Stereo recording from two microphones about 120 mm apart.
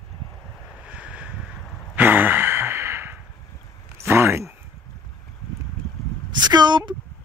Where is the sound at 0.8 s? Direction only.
10° right (ahead or behind).